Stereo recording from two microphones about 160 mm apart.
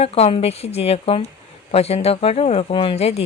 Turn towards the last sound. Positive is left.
turn(degrees=40)  # may be behind; listen again after turning